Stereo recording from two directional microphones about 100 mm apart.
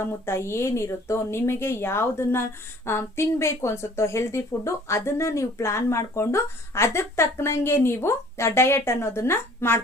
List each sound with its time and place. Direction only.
0.0 s speech: 25° left (ahead or behind)